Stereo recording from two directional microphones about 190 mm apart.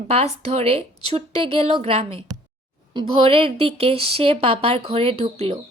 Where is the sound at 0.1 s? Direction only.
35° right (ahead or behind).